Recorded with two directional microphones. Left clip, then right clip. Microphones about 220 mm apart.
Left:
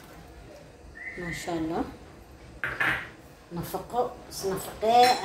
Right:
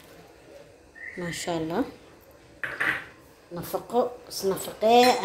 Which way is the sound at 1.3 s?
40° right (ahead or behind).